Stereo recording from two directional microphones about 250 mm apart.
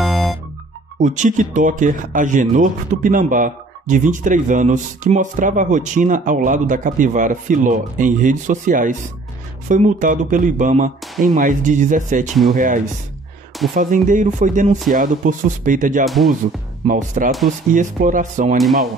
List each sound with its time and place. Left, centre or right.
0.0 s music: centre
0.9 s speech: right